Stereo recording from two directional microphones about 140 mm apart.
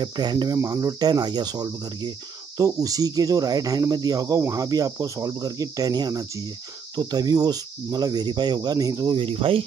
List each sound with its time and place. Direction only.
0.0 s cricket: 30° right (ahead or behind)